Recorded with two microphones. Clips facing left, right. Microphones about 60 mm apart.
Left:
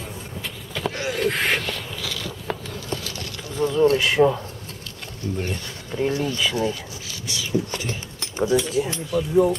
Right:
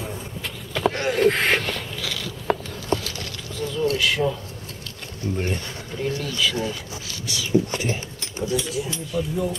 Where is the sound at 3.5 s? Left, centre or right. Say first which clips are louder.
Left 5 dB; left.